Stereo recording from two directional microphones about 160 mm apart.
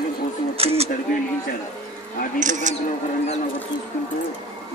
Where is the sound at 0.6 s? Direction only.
40° right (ahead or behind).